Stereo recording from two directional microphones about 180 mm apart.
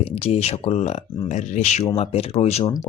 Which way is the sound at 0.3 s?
35° left (ahead or behind).